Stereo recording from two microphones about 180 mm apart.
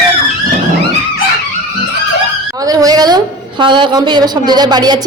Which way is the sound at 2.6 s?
20° right (ahead or behind).